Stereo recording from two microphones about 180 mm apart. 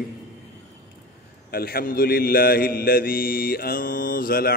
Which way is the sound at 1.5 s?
55° left (ahead or behind).